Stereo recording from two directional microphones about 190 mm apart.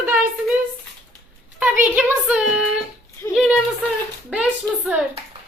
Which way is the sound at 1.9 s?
5° right (ahead or behind).